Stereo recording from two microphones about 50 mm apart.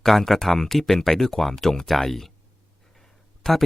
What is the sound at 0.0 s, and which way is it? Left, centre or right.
Speech, centre.